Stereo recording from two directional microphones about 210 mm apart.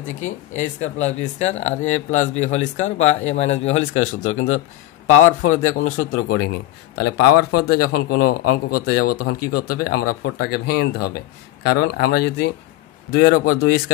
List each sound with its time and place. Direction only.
0.1 s speech: 35° left (ahead or behind)